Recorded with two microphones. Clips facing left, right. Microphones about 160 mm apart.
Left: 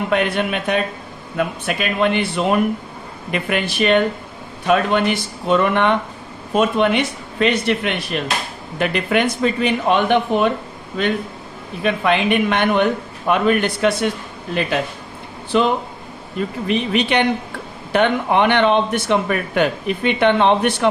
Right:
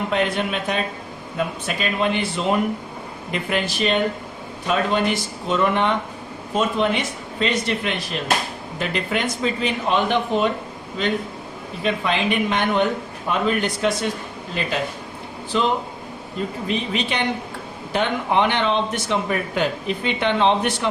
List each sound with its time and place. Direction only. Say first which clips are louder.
0.1 s speech: left 4 dB; 60° left (ahead or behind)
11.8 s speech: left 4 dB; 60° left (ahead or behind)
15.5 s speech: left 4 dB; 65° left (ahead or behind)